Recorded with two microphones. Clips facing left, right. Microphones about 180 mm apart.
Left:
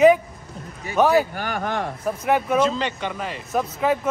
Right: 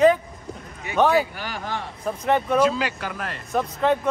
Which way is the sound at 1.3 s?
55° left (ahead or behind).